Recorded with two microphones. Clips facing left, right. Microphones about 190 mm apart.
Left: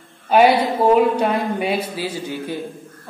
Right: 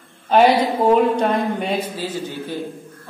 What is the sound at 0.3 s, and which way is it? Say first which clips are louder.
A man's voice: even; 5° left (ahead or behind).